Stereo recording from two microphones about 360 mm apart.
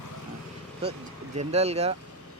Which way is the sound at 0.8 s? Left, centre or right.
Centre.